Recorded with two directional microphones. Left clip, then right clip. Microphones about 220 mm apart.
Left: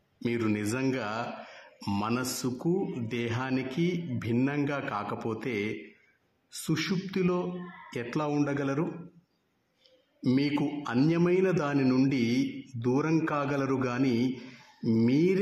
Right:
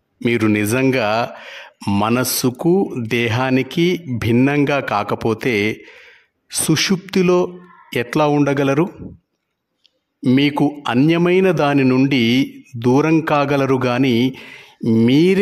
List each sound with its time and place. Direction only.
0.2 s speech: 45° right (ahead or behind)
10.2 s speech: 45° right (ahead or behind)